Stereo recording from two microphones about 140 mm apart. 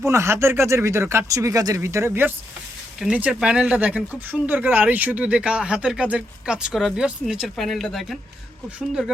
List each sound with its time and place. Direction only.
0.0 s speech: 20° right (ahead or behind); by 8.2 s centre (ahead or behind)